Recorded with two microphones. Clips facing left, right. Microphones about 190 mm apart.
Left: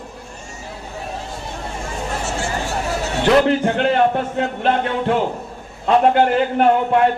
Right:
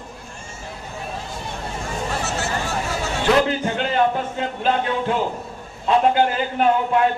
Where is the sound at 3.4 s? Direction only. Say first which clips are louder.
Left 6 dB; 60° left (ahead or behind).